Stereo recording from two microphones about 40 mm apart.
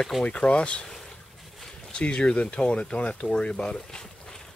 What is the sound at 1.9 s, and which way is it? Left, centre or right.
Speech, left.